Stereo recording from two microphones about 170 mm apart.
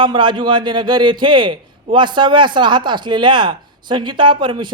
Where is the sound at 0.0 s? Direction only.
25° right (ahead or behind).